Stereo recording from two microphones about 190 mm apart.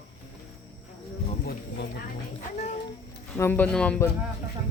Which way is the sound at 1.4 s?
55° left (ahead or behind).